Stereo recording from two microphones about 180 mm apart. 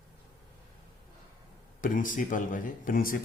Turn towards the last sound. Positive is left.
turn(degrees=50)  # may be behind; listen again after turning